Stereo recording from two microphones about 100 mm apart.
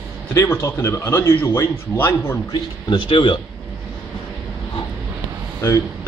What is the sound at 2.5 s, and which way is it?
Speech, 50° left (ahead or behind).